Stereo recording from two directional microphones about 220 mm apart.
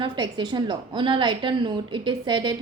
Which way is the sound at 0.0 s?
20° right (ahead or behind).